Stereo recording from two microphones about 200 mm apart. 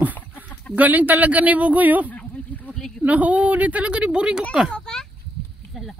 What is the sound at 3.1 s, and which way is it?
A man's voice, 5° right (ahead or behind).